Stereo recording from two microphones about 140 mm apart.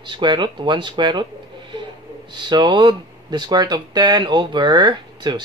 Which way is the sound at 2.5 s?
35° right (ahead or behind).